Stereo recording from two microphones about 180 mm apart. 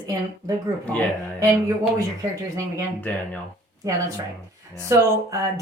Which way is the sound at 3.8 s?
20° right (ahead or behind).